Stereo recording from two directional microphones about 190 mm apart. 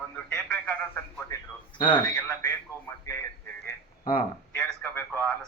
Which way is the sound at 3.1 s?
15° left (ahead or behind).